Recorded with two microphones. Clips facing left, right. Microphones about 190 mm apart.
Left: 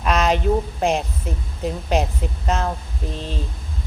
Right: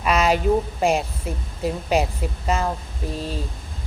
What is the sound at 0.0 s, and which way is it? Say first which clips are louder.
A woman's voice: even; 5° right (ahead or behind).